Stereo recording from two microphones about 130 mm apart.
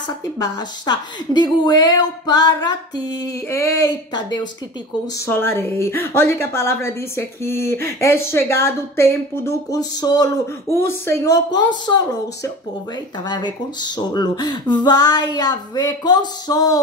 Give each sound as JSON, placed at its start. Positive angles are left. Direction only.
{"t": 0.4, "sound": "a woman's voice", "side_deg": 30}
{"t": 5.2, "sound": "a woman's voice", "side_deg": 20}
{"t": 11.5, "sound": "speech", "side_deg": 35}
{"t": 13.3, "sound": "speech", "side_deg": 35}